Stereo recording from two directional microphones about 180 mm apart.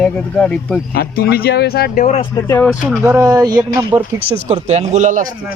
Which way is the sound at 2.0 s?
35° left (ahead or behind).